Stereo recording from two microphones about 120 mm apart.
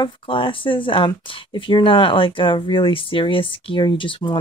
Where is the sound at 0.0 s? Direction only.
45° left (ahead or behind).